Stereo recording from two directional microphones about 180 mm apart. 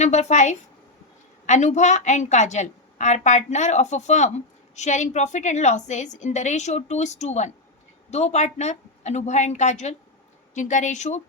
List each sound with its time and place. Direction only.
0.0 s a woman's voice: 40° left (ahead or behind)